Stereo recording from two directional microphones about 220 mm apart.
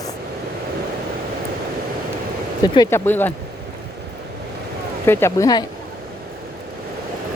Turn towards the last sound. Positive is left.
turn(degrees=15)  # may be behind; listen again after turning